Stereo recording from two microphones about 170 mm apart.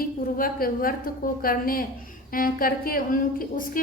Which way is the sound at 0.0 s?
60° left (ahead or behind).